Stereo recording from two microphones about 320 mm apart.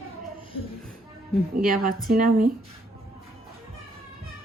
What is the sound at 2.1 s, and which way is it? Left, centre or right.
Speech, right.